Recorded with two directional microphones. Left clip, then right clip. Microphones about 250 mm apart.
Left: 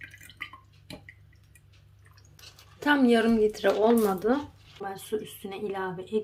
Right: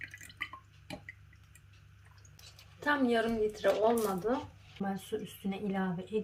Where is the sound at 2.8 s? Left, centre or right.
Left.